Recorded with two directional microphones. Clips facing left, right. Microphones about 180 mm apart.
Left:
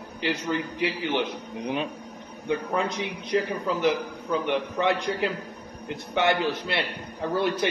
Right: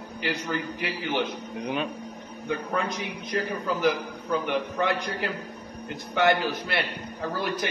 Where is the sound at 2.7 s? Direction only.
20° left (ahead or behind).